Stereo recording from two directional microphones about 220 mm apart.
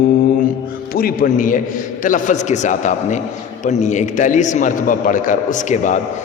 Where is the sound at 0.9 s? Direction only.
40° left (ahead or behind).